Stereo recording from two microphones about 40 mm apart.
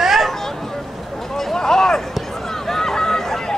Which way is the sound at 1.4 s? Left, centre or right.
Centre.